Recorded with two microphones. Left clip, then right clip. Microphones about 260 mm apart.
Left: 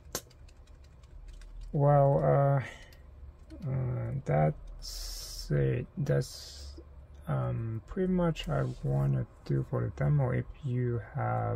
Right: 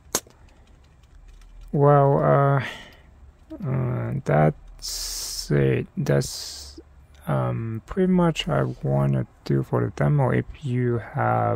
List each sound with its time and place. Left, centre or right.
0.1 s a sound: right
1.7 s speech: right
3.6 s spray: right
7.2 s speech: right